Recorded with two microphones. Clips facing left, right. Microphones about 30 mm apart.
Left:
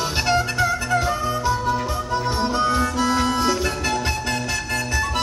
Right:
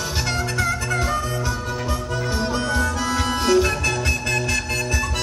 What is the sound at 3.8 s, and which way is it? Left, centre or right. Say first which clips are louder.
Music: right 1 dB; centre.